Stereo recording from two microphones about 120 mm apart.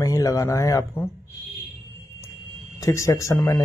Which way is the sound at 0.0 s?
30° left (ahead or behind).